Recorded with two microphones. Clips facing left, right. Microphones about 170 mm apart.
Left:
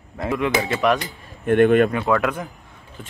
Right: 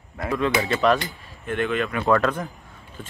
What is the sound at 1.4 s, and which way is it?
Speech, 55° left (ahead or behind).